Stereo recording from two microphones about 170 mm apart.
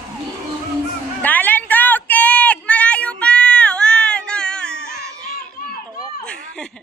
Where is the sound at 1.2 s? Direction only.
10° left (ahead or behind).